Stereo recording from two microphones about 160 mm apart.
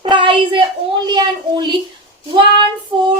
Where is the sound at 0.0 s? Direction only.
30° right (ahead or behind).